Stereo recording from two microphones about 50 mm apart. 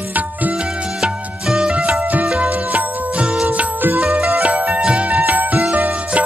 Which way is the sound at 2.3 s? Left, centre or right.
Right.